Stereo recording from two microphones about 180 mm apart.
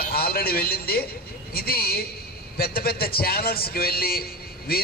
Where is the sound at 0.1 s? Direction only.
55° left (ahead or behind).